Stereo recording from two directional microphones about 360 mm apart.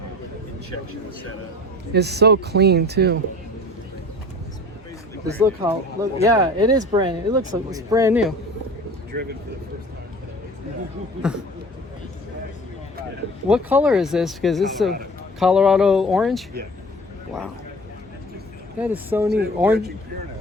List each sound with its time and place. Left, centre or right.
1.9 s speech: right
5.4 s speech: centre
9.1 s speech: right
13.5 s speech: centre
18.8 s speech: centre